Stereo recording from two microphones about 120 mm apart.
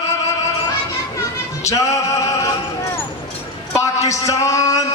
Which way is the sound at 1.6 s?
25° left (ahead or behind).